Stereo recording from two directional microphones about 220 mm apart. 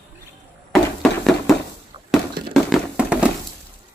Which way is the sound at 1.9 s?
20° right (ahead or behind).